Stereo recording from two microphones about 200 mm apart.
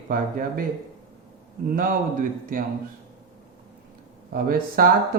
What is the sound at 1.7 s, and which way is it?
Speech, 45° right (ahead or behind).